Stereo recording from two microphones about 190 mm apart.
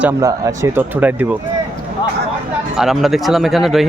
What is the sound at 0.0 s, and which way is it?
Speech, 15° right (ahead or behind).